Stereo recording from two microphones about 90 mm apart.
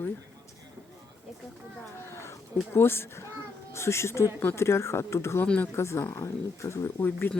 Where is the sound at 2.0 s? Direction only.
30° left (ahead or behind).